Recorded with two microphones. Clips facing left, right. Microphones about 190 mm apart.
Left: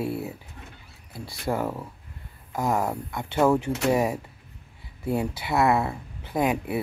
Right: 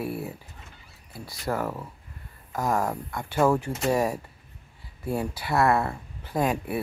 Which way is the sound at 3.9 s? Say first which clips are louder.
Left 1 dB; 15° left (ahead or behind).